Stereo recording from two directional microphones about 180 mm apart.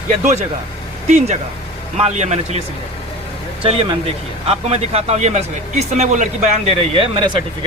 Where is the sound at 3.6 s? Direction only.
35° right (ahead or behind).